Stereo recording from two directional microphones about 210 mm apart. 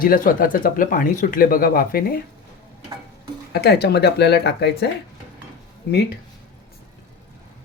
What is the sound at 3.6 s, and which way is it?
Speech, 50° left (ahead or behind).